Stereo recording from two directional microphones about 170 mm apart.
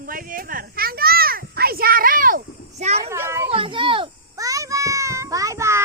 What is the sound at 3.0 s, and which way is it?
Speech, 15° right (ahead or behind).